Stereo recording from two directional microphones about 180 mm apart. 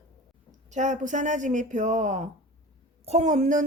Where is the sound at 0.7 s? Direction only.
40° right (ahead or behind).